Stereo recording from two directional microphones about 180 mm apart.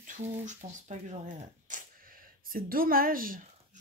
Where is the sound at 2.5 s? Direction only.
55° right (ahead or behind).